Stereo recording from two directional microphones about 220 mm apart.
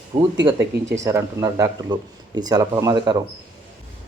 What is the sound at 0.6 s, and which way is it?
Speech, 55° right (ahead or behind).